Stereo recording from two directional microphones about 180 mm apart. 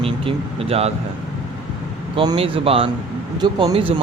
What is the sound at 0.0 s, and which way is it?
Speech, 30° right (ahead or behind).